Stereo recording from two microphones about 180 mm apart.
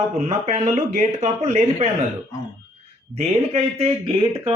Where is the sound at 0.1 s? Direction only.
35° right (ahead or behind).